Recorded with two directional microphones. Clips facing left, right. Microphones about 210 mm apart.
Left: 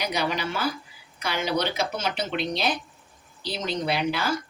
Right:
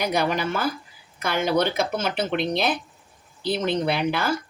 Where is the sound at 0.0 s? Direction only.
50° right (ahead or behind).